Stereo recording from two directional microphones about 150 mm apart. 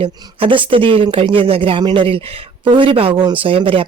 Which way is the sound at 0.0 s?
35° right (ahead or behind).